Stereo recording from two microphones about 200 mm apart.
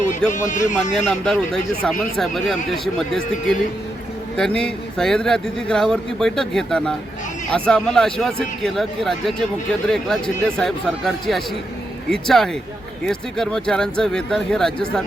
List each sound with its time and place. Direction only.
0.3 s speech: 40° left (ahead or behind)
1.0 s speech: 5° left (ahead or behind)